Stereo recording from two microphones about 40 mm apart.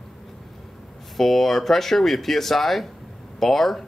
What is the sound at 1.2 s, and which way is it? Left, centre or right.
Speech, centre.